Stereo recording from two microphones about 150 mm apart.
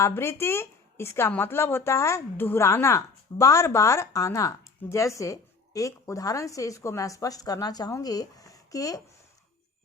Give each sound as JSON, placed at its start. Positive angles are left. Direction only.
{"t": 0.0, "sound": "speech", "side_deg": 15}